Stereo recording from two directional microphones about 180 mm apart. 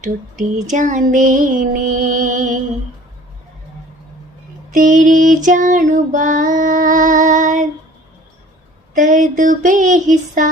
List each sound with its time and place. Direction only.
0.0 s female singing: 45° right (ahead or behind)
4.7 s female singing: 45° right (ahead or behind)
9.0 s female singing: 40° right (ahead or behind)